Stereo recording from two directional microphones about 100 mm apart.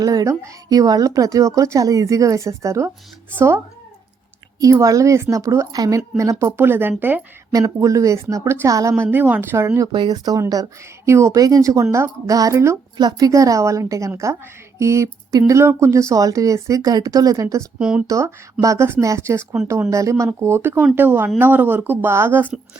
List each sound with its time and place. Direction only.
0.0 s a woman's voice: 35° right (ahead or behind); by 3.6 s 20° right (ahead or behind)
4.6 s a woman's voice: 35° right (ahead or behind)
6.4 s a woman's voice: 25° right (ahead or behind)
7.5 s a woman's voice: 35° right (ahead or behind)
9.9 s a woman's voice: 45° right (ahead or behind)
11.1 s a woman's voice: 30° right (ahead or behind)
11.3 s a woman's voice: 40° right (ahead or behind)
17.7 s speech: 5° right (ahead or behind)
18.6 s a woman's voice: 30° right (ahead or behind)